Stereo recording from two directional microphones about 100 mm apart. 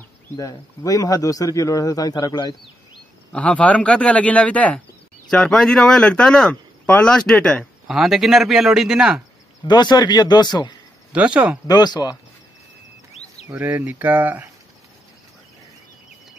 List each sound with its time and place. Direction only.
0.4 s speech: 35° left (ahead or behind)
3.3 s speech: 15° left (ahead or behind)
7.9 s speech: 5° right (ahead or behind)
9.7 s speech: 45° left (ahead or behind)
11.1 s speech: 15° right (ahead or behind)
11.6 s speech: 45° left (ahead or behind)
13.6 s speech: 15° right (ahead or behind)